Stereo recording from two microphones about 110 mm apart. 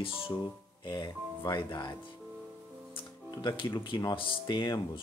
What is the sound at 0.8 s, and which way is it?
Speech, 40° left (ahead or behind).